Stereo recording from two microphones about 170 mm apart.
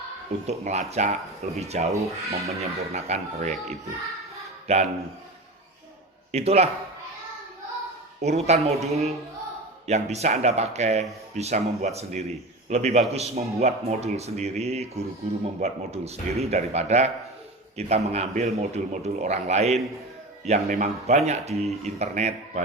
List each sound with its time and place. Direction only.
0.4 s speech: 40° right (ahead or behind)
6.3 s speech: 40° right (ahead or behind)
8.2 s speech: 40° right (ahead or behind)